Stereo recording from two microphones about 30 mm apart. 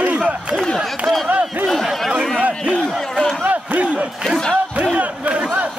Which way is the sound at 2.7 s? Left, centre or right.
Centre.